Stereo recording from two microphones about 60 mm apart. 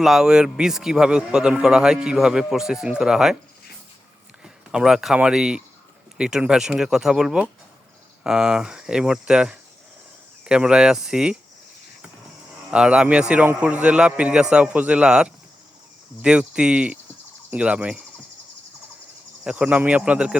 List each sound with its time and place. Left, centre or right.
0.0 s a man's voice: centre
4.4 s a man's voice: centre
12.7 s a man's voice: centre
19.5 s a man's voice: right